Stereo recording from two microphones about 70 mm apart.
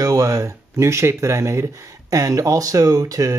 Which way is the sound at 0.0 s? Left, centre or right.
Right.